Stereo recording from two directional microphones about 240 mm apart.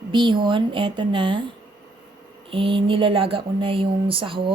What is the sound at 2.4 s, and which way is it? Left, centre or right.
Speech, right.